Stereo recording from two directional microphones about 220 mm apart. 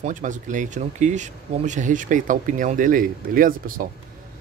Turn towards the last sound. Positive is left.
turn(degrees=-40)  # may be behind; listen again after turning